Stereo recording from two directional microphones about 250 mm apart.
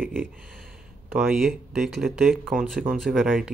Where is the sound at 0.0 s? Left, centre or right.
Centre.